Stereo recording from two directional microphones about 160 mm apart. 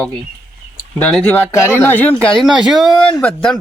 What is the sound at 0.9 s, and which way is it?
Speech, 5° left (ahead or behind).